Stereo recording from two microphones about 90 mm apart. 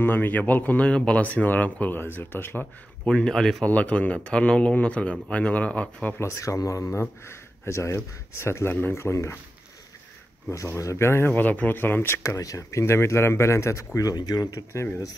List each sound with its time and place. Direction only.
0.0 s speech: 20° left (ahead or behind)
3.1 s speech: 10° left (ahead or behind)
3.6 s speech: 15° left (ahead or behind)
6.2 s speech: 35° left (ahead or behind)
10.5 s speech: 35° left (ahead or behind)
12.2 s speech: 40° left (ahead or behind)